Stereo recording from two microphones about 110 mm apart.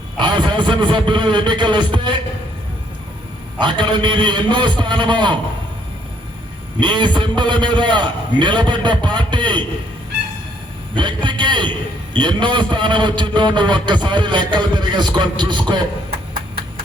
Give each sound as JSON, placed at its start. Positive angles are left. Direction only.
{"t": 0.2, "sound": "a man's voice", "side_deg": -45}
{"t": 3.6, "sound": "a man's voice", "side_deg": -45}
{"t": 6.7, "sound": "a man's voice", "side_deg": -45}
{"t": 10.9, "sound": "a man's voice", "side_deg": -45}